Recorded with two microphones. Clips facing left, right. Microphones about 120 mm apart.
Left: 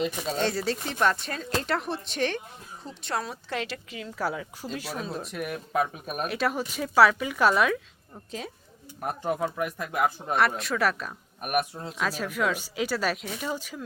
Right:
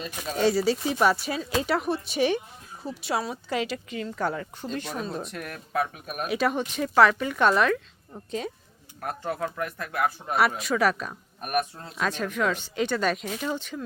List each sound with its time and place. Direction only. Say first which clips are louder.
0.3 s speech: right 8 dB; 5° right (ahead or behind)
5.7 s speech: even; 20° left (ahead or behind)
6.2 s speech: right 3 dB; centre (ahead or behind)
9.0 s speech: left 2 dB; 15° left (ahead or behind)
10.3 s speech: right 3 dB; centre (ahead or behind)
11.3 s speech: even; 10° left (ahead or behind)